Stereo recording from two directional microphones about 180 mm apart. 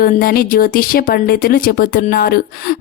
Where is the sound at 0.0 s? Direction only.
55° left (ahead or behind).